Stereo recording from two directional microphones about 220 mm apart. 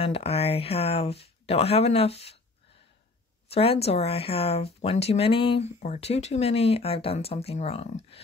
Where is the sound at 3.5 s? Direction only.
25° left (ahead or behind).